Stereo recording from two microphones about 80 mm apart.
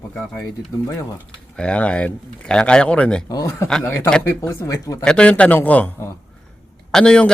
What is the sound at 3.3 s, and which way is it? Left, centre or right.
Speech, left.